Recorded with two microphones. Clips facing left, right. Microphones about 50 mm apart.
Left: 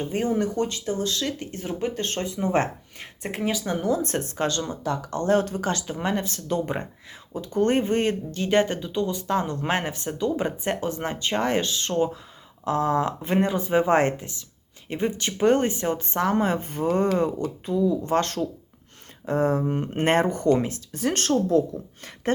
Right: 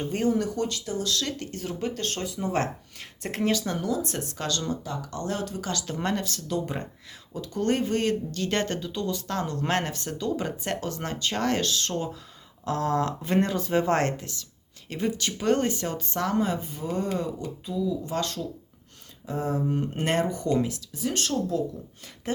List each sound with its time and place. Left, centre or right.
0.1 s speech: left
1.2 s speech: centre; by 3.1 s left
3.2 s speech: centre
3.7 s speech: left
3.9 s speech: left
5.8 s speech: centre
6.2 s speech: left